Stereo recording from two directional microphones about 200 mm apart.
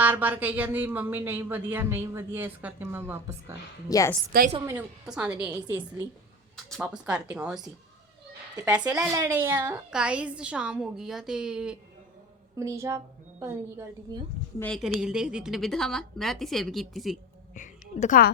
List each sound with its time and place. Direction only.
0.0 s speech: 10° right (ahead or behind)
3.8 s a woman's voice: 15° left (ahead or behind)
4.3 s a woman's voice: 45° right (ahead or behind)
4.6 s speech: 10° right (ahead or behind)
6.8 s a woman's voice: 5° right (ahead or behind)
12.5 s speech: 15° right (ahead or behind)
14.6 s a woman's voice: centre (ahead or behind)
17.5 s a sound: 40° left (ahead or behind)